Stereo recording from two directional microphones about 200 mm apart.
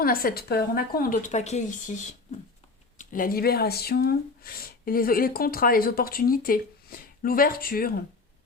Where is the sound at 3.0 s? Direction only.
45° left (ahead or behind).